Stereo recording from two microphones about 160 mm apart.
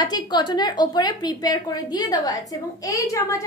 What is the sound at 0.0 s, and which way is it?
A woman's voice, 25° left (ahead or behind).